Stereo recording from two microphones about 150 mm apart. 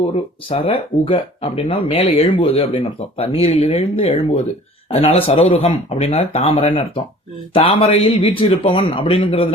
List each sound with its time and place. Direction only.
0.4 s speech: 40° left (ahead or behind)